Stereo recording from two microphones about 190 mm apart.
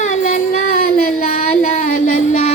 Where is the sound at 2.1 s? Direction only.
35° left (ahead or behind).